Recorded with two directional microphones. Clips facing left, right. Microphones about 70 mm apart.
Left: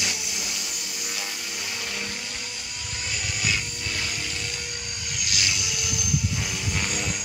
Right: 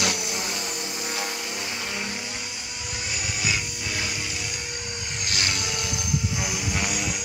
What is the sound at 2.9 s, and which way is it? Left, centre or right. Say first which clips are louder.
Music: even; centre.